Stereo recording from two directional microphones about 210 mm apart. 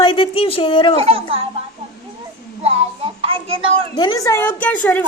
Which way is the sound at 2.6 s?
30° right (ahead or behind).